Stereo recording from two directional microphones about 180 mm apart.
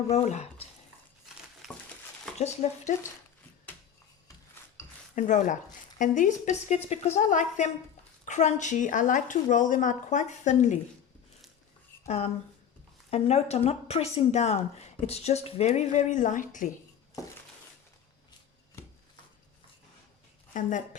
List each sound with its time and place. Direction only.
0.1 s speech: 40° left (ahead or behind)
1.6 s a sound: centre (ahead or behind)
2.4 s speech: 40° left (ahead or behind)
5.1 s speech: 45° left (ahead or behind)
12.0 s speech: 35° left (ahead or behind)
17.2 s a sound: 20° left (ahead or behind)
20.5 s speech: 45° left (ahead or behind)